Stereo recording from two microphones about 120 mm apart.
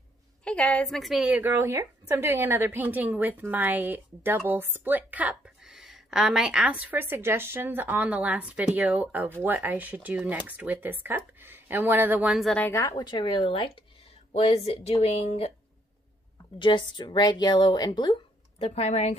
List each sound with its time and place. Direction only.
0.4 s a woman's voice: 10° left (ahead or behind); by 12.3 s 15° right (ahead or behind)
12.3 s a woman's voice: centre (ahead or behind)
12.7 s a woman's voice: 25° left (ahead or behind)
13.0 s speech: 40° left (ahead or behind); by 15.5 s 60° left (ahead or behind)
16.5 s speech: 45° left (ahead or behind)
18.6 s speech: 65° left (ahead or behind)